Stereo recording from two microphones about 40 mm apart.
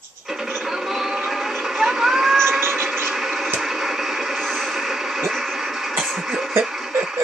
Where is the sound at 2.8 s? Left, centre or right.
Right.